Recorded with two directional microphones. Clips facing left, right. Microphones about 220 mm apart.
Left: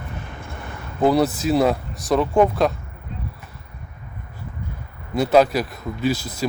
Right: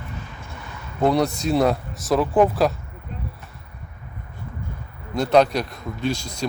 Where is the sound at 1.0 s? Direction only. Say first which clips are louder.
Left 2 dB; 5° left (ahead or behind).